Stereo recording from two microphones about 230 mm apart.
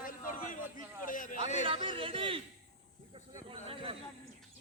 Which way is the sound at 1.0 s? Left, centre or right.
Left.